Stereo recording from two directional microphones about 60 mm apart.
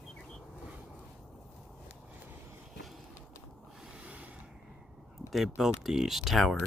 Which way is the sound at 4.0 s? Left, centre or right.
Right.